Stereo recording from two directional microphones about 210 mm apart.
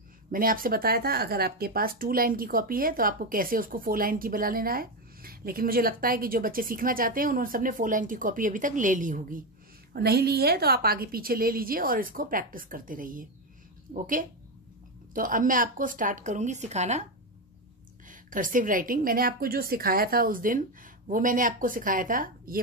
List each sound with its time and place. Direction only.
0.3 s speech: 40° right (ahead or behind)
9.9 s a woman's voice: 50° right (ahead or behind); by 17.0 s 30° right (ahead or behind)
18.0 s a woman's voice: 40° right (ahead or behind)